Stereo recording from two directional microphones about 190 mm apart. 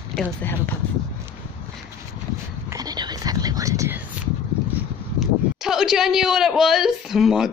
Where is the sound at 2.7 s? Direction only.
20° right (ahead or behind).